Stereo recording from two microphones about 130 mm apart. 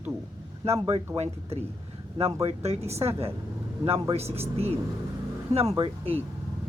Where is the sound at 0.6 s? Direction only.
50° right (ahead or behind).